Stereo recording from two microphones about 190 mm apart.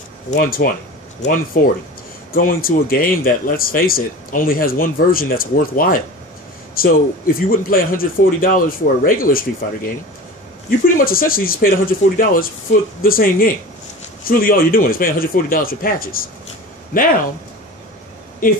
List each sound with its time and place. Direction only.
0.4 s speech: 50° left (ahead or behind)
11.0 s speech: 50° left (ahead or behind)